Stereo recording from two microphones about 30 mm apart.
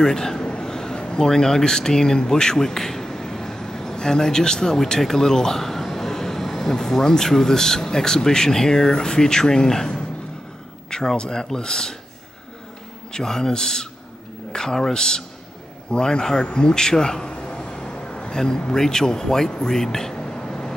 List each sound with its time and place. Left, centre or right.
0.0 s speech: centre
10.9 s a man's voice: left
13.1 s a man's voice: centre
17.0 s a sound: left